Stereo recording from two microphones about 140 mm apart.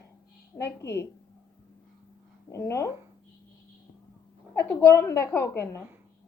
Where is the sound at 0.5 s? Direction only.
20° left (ahead or behind).